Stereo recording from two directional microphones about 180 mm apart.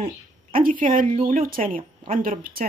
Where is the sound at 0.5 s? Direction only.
50° right (ahead or behind).